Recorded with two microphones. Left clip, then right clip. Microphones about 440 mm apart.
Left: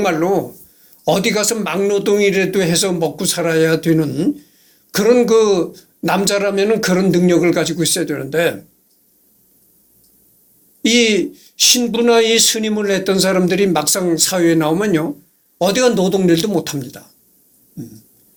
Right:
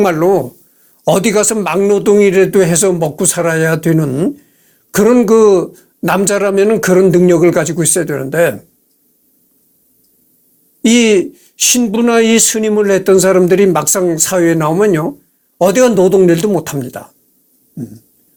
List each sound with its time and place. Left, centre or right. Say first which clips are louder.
0.0 s speech: right 5 dB; right
10.8 s speech: right 4 dB; right